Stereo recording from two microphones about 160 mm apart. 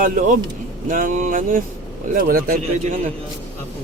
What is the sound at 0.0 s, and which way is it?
Speech, 55° right (ahead or behind).